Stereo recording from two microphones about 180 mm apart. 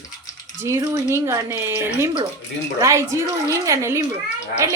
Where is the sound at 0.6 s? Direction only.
15° right (ahead or behind).